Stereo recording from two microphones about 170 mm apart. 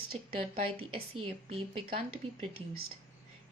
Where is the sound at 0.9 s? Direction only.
30° right (ahead or behind).